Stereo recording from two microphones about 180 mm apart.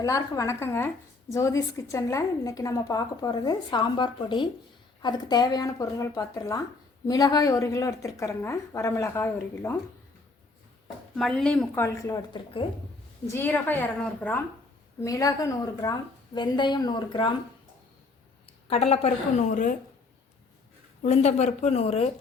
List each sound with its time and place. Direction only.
0.0 s a woman's voice: 20° left (ahead or behind)
11.2 s speech: centre (ahead or behind)
11.8 s a woman's voice: 20° left (ahead or behind)
13.2 s a woman's voice: 10° left (ahead or behind)
15.0 s a woman's voice: 20° left (ahead or behind)
18.4 s a woman's voice: 35° left (ahead or behind)
21.0 s a woman's voice: 40° left (ahead or behind)